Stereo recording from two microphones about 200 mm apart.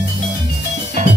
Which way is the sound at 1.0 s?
35° right (ahead or behind).